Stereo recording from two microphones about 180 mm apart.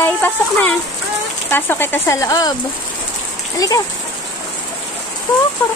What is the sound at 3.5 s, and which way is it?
Speech, 20° left (ahead or behind).